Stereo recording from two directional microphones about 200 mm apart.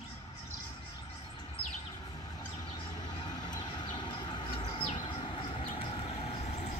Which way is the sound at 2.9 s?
20° left (ahead or behind).